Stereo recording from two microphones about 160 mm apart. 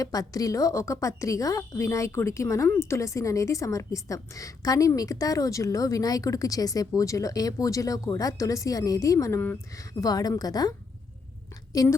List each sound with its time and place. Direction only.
0.0 s a woman's voice: 20° left (ahead or behind)